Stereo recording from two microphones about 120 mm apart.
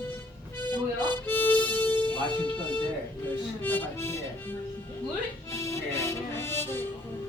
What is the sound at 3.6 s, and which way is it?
Music, 15° left (ahead or behind).